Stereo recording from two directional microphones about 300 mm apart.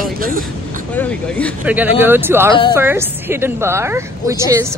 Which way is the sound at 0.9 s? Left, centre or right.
Centre.